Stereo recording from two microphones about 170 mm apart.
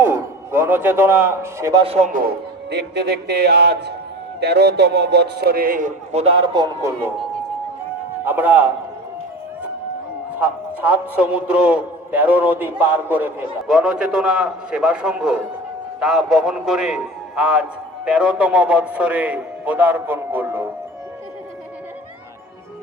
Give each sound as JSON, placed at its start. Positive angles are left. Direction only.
{"t": 0.0, "sound": "a man's voice", "side_deg": -15}
{"t": 1.8, "sound": "a man's voice", "side_deg": -35}
{"t": 2.1, "sound": "speech", "side_deg": -70}
{"t": 6.1, "sound": "speech", "side_deg": -35}
{"t": 8.2, "sound": "a man's voice", "side_deg": -10}
{"t": 10.3, "sound": "a man's voice", "side_deg": -10}